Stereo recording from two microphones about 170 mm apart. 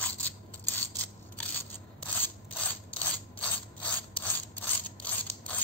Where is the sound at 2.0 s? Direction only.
10° left (ahead or behind).